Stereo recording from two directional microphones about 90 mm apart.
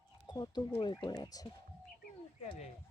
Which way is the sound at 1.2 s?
45° left (ahead or behind).